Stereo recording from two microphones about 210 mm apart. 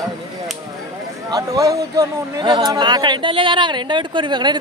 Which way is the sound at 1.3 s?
15° right (ahead or behind).